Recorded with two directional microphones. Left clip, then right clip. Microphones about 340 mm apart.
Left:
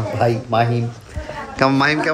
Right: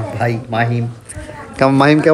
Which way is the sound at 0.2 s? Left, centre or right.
Centre.